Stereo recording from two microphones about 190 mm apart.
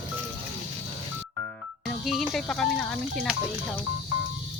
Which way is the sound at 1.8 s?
Centre (ahead or behind).